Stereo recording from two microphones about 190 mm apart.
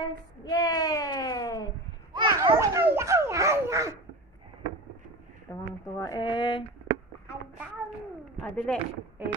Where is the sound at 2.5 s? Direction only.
15° right (ahead or behind).